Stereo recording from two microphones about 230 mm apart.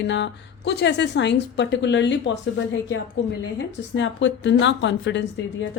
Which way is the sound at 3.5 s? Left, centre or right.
Left.